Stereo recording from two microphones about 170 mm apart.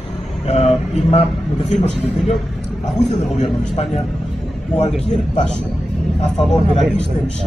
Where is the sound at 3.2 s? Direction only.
40° left (ahead or behind).